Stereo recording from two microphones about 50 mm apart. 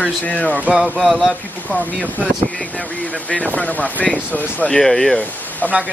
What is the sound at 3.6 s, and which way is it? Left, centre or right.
Speech, left.